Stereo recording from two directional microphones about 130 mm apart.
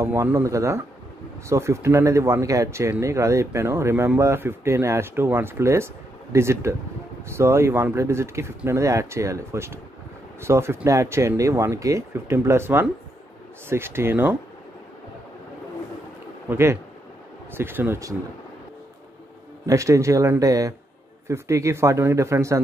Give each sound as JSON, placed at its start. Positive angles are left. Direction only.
{"t": 0.0, "sound": "speech", "side_deg": -20}
{"t": 16.4, "sound": "speech", "side_deg": -20}
{"t": 19.6, "sound": "speech", "side_deg": -25}